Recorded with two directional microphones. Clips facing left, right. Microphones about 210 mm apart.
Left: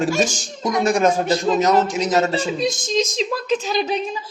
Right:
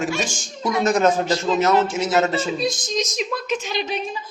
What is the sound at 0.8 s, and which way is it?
A man's voice, 10° left (ahead or behind).